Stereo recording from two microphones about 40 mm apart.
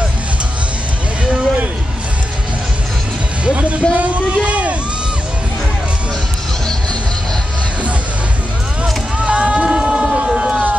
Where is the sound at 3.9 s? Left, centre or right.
Right.